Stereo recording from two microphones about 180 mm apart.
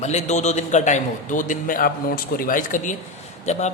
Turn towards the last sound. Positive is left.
turn(degrees=40)  # may be behind; listen again after turning